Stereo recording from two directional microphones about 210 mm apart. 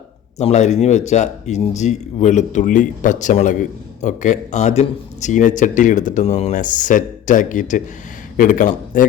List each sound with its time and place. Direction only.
0.3 s speech: 30° left (ahead or behind)